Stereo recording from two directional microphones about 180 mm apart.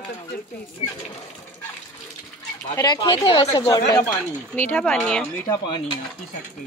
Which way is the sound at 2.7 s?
25° left (ahead or behind).